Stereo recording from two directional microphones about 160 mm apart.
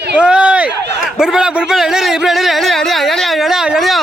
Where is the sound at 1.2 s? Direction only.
5° right (ahead or behind).